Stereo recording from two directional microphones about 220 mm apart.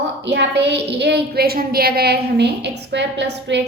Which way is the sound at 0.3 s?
50° right (ahead or behind).